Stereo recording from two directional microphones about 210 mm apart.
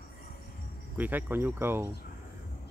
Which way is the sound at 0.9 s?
10° right (ahead or behind).